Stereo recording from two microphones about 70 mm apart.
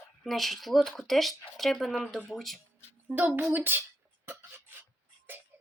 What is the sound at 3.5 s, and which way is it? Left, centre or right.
Speech, right.